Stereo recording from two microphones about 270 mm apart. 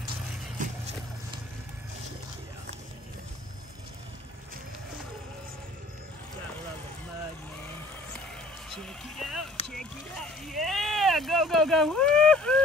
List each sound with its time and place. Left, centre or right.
0.6 s vehicle: right
8.6 s a sound: centre
9.7 s rowboat: centre